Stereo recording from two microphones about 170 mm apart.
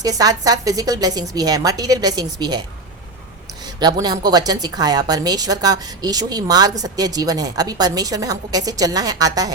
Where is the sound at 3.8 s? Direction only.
25° right (ahead or behind).